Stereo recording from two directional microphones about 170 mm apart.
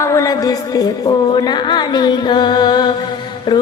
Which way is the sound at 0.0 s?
20° left (ahead or behind).